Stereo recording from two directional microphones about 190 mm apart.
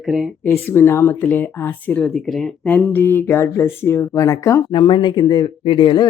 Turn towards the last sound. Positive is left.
turn(degrees=25)  # may be behind; listen again after turning